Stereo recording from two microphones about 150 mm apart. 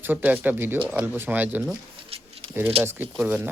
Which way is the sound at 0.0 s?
10° right (ahead or behind).